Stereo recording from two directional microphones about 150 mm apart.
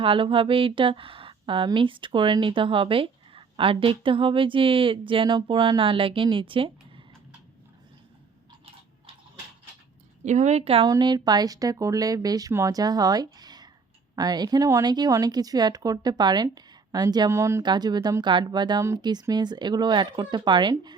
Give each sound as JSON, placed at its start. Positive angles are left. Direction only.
{"t": 0.0, "sound": "a woman's voice", "side_deg": -35}
{"t": 10.2, "sound": "a woman's voice", "side_deg": -50}
{"t": 10.8, "sound": "speech", "side_deg": -25}